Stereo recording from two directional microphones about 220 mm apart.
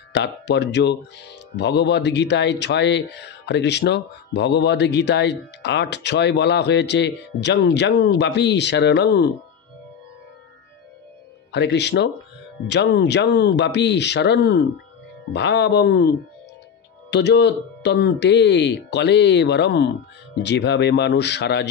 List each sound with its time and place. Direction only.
0.1 s speech: 50° left (ahead or behind)
11.5 s speech: 50° left (ahead or behind)
17.1 s speech: 50° left (ahead or behind)